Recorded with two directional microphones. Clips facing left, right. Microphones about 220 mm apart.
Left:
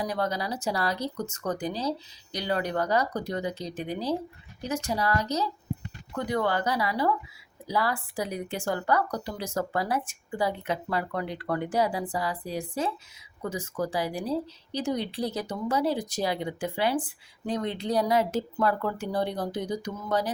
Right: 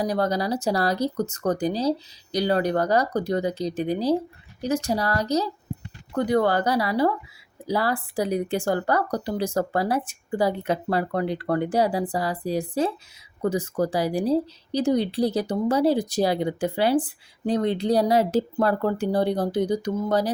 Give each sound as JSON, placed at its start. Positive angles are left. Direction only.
{"t": 0.0, "sound": "speech", "side_deg": -35}